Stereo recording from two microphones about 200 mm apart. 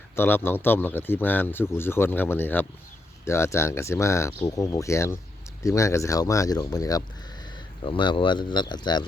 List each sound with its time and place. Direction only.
0.2 s a man's voice: 10° left (ahead or behind)